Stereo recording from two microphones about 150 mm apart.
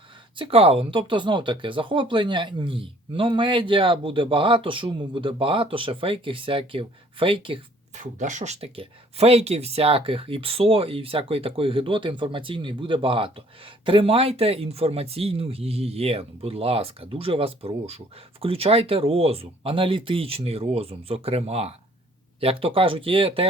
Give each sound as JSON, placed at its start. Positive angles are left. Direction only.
{"t": 0.3, "sound": "speech", "side_deg": -35}
{"t": 7.9, "sound": "speech", "side_deg": -55}
{"t": 8.6, "sound": "speech", "side_deg": -40}